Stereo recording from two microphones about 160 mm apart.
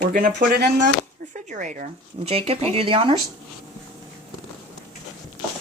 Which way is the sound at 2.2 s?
35° right (ahead or behind).